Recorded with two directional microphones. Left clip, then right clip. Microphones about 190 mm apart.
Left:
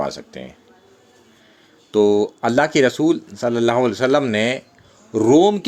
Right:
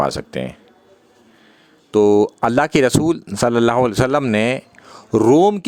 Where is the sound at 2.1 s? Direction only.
45° right (ahead or behind).